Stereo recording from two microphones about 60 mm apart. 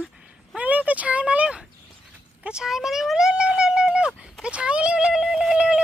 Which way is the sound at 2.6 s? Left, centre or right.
Centre.